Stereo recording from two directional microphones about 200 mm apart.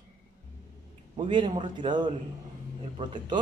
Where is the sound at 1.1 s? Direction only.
25° right (ahead or behind).